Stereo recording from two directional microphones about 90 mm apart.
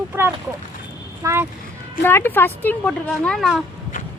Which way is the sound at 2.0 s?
25° left (ahead or behind).